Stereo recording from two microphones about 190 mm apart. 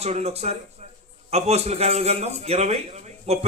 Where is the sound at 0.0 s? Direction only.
35° right (ahead or behind).